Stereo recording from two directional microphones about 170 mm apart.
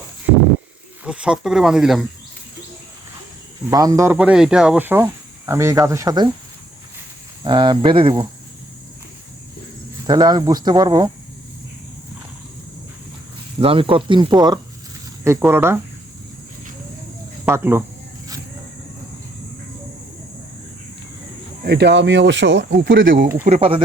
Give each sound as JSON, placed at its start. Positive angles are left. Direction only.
{"t": 1.0, "sound": "speech", "side_deg": -5}
{"t": 3.7, "sound": "speech", "side_deg": -20}
{"t": 7.4, "sound": "speech", "side_deg": -25}
{"t": 10.1, "sound": "speech", "side_deg": -25}
{"t": 13.6, "sound": "speech", "side_deg": -30}
{"t": 17.4, "sound": "speech", "side_deg": -15}
{"t": 21.6, "sound": "speech", "side_deg": -75}
{"t": 23.5, "sound": "speech", "side_deg": -35}